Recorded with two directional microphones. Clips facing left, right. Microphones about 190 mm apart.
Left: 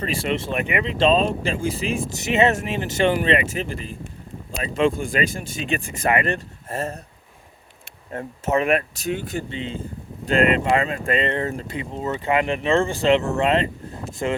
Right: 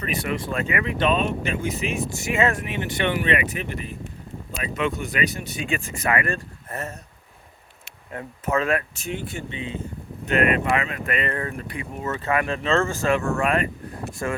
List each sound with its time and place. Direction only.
0.0 s speech: 30° left (ahead or behind)
2.2 s speech: 20° left (ahead or behind)
8.4 s speech: 20° left (ahead or behind)
9.0 s speech: 40° left (ahead or behind); by 14.3 s 20° left (ahead or behind)